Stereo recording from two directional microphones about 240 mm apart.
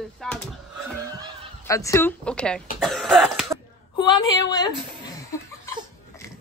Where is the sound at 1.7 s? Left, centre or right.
Centre.